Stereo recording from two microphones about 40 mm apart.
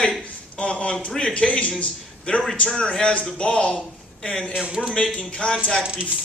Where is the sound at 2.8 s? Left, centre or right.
Left.